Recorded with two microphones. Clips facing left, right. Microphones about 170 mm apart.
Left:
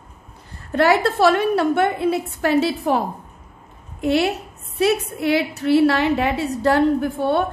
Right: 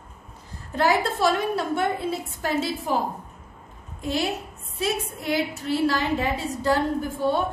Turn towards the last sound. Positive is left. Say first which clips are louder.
# left 5 dB
turn(degrees=65)  # may be behind; listen again after turning